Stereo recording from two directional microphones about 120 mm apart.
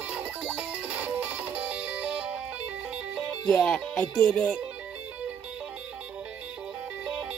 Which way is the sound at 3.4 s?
5° left (ahead or behind).